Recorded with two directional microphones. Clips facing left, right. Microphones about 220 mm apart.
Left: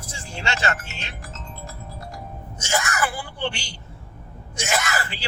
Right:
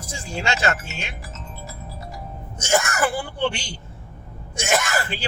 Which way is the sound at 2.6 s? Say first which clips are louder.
Right 4 dB; 50° right (ahead or behind).